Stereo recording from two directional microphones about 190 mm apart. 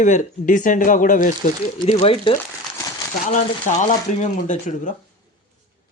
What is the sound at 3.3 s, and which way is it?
Speech, 40° left (ahead or behind).